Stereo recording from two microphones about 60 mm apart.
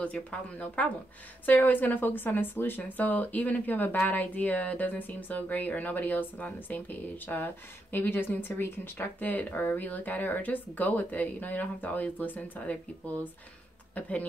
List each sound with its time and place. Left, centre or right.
0.0 s speech: left